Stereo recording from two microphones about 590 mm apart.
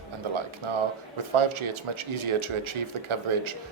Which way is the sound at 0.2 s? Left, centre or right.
Right.